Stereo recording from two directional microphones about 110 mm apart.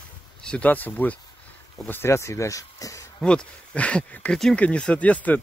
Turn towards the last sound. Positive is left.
turn(degrees=15)  # may be behind; listen again after turning